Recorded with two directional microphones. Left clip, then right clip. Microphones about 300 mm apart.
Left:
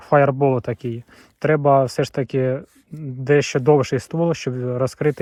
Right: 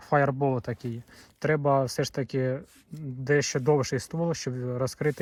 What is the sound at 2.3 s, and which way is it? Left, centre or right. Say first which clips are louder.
Speech: left 9 dB; centre.